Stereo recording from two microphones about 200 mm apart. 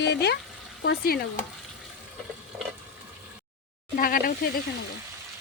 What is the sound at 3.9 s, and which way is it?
Speech, 45° left (ahead or behind).